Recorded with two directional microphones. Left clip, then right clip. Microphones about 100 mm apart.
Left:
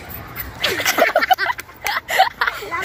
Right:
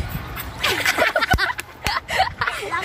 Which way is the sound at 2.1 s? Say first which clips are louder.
Left 6 dB; 35° left (ahead or behind).